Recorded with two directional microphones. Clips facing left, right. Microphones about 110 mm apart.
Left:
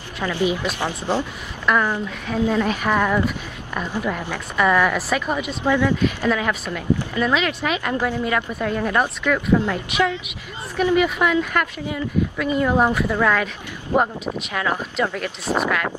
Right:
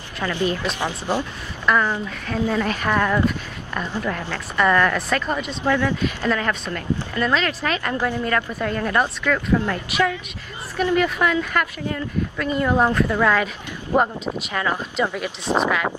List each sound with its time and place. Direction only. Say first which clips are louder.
0.2 s speech: left 1 dB; 15° left (ahead or behind)
0.7 s speech: left 1 dB; 15° right (ahead or behind)
1.7 s speech: even; 5° left (ahead or behind)
10.8 s speech: left 1 dB; 10° left (ahead or behind)
13.2 s speech: even; 5° right (ahead or behind)
15.0 s speech: even; 15° right (ahead or behind)